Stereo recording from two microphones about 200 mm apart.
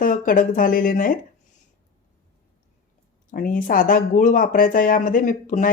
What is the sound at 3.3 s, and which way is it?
Speech, 40° left (ahead or behind).